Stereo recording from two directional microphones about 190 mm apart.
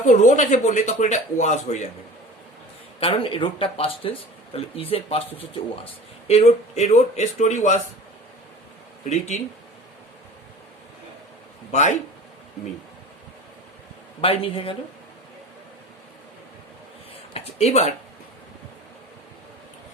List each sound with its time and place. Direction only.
0.0 s speech: 40° left (ahead or behind)
3.0 s speech: 30° left (ahead or behind)
9.0 s speech: 35° left (ahead or behind)
11.7 s speech: 40° left (ahead or behind)
14.2 s speech: 30° left (ahead or behind)
17.3 s speech: 35° left (ahead or behind)